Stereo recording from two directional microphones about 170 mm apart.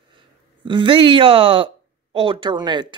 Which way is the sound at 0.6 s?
30° right (ahead or behind).